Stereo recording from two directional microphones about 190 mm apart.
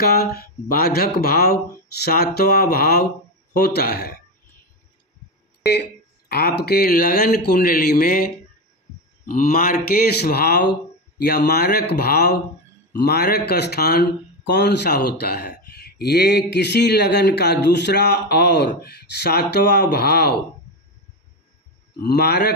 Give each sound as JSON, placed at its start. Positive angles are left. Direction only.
{"t": 0.0, "sound": "speech", "side_deg": 55}
{"t": 5.6, "sound": "speech", "side_deg": 60}
{"t": 22.0, "sound": "speech", "side_deg": 55}